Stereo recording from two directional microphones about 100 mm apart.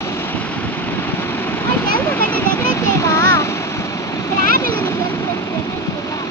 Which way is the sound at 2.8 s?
30° left (ahead or behind).